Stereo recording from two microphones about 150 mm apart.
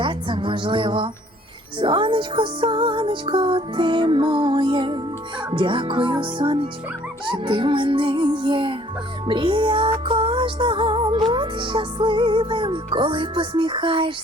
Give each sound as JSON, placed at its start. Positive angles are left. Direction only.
{"t": 0.0, "sound": "a woman's voice", "side_deg": -35}
{"t": 1.8, "sound": "music", "side_deg": -35}